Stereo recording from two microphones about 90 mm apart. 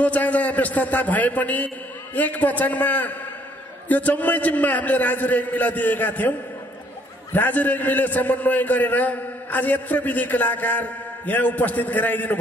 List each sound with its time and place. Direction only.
0.0 s a man's voice: 15° left (ahead or behind)
7.3 s a man's voice: 20° left (ahead or behind)